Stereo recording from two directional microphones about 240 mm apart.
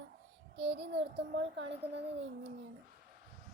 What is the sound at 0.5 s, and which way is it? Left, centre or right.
Child singing, right.